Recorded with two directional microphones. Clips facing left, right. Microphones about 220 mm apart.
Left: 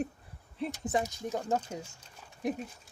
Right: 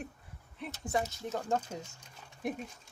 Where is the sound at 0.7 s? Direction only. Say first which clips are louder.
Left 1 dB; 15° left (ahead or behind).